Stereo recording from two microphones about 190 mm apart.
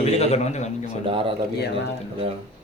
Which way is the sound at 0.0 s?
35° left (ahead or behind).